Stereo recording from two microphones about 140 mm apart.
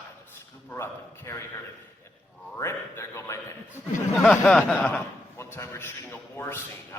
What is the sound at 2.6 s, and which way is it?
Speech, 20° left (ahead or behind).